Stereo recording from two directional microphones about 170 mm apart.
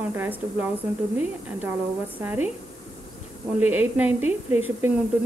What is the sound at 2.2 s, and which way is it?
Speech, 10° right (ahead or behind).